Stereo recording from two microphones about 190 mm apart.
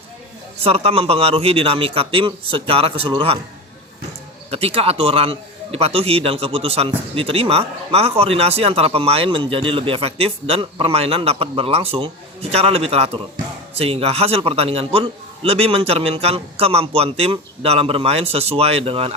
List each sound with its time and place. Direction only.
0.6 s a man's voice: 30° right (ahead or behind)
4.5 s a man's voice: 30° right (ahead or behind)